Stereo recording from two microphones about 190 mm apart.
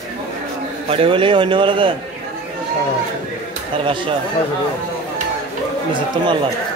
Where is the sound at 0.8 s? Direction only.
30° right (ahead or behind).